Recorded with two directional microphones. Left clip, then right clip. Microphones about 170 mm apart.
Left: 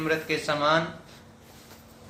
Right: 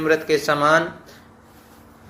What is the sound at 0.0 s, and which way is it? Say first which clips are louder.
Speech: right 8 dB; 35° right (ahead or behind).